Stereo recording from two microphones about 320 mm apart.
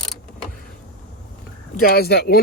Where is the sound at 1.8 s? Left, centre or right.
Left.